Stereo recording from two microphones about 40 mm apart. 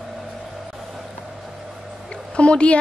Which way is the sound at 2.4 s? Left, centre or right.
Left.